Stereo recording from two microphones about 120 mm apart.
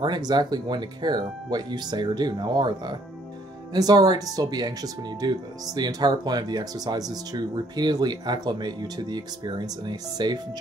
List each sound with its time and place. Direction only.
0.0 s speech: 35° right (ahead or behind)